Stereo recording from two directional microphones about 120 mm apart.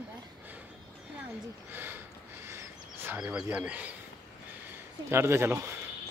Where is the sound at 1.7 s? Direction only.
15° right (ahead or behind).